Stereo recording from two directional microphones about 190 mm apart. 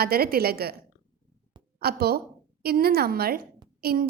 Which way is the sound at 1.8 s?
55° right (ahead or behind).